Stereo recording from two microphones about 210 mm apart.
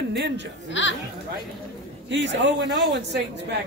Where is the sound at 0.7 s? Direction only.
60° left (ahead or behind).